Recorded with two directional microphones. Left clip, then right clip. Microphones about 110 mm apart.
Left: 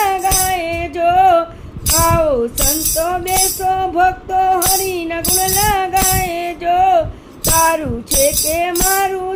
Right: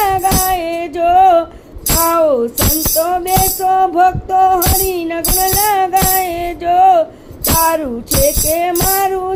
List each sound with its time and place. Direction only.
0.0 s music: 50° right (ahead or behind)